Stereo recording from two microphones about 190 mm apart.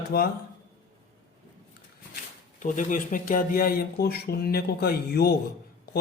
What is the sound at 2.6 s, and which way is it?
Speech, 40° left (ahead or behind).